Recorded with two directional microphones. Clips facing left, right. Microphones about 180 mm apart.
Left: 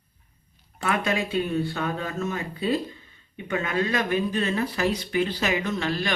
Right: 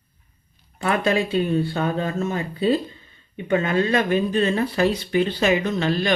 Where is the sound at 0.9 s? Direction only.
30° right (ahead or behind).